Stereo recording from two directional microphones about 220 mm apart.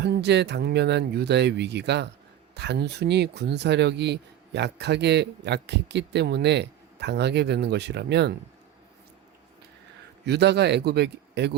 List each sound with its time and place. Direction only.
0.0 s speech: 50° right (ahead or behind)
10.2 s speech: 50° right (ahead or behind)